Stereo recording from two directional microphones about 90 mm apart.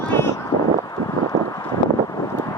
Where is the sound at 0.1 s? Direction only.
25° left (ahead or behind).